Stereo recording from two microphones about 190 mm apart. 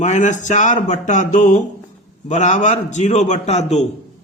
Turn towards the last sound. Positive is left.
turn(degrees=35)  # may be behind; listen again after turning